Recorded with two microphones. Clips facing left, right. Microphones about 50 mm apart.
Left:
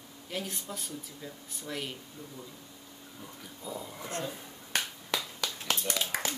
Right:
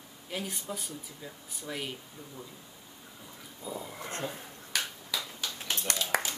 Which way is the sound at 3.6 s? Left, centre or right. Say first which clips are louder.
Right 1 dB; centre.